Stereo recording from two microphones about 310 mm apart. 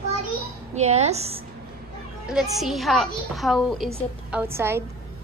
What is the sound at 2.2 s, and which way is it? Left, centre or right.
Speech, centre.